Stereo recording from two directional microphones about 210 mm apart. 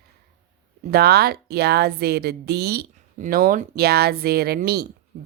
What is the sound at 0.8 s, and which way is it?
A woman's voice, 50° right (ahead or behind).